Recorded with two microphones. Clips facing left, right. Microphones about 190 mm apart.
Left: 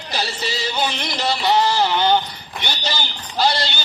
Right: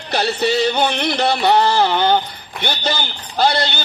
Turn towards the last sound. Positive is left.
turn(degrees=-55)  # may be behind; listen again after turning